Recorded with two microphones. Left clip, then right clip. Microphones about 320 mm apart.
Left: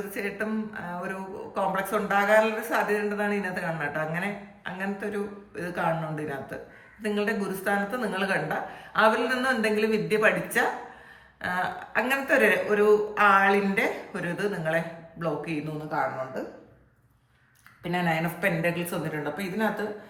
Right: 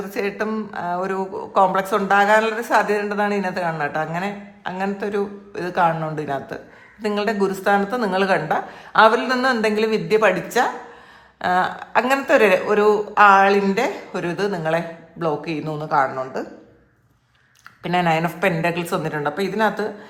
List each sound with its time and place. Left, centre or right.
0.1 s speech: centre
17.8 s speech: centre